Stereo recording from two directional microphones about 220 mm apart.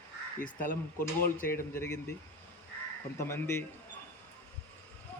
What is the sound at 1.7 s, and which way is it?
Speech, 10° left (ahead or behind).